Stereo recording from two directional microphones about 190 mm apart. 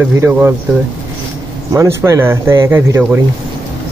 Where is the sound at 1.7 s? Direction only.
15° right (ahead or behind).